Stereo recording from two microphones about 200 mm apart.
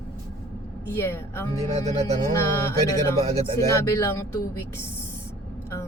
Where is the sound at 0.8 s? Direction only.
10° left (ahead or behind).